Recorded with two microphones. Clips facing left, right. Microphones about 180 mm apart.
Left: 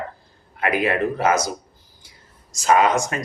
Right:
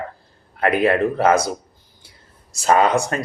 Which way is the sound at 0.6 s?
30° right (ahead or behind).